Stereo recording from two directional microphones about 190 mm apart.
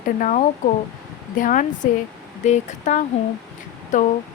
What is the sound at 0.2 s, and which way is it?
Speech, 40° left (ahead or behind).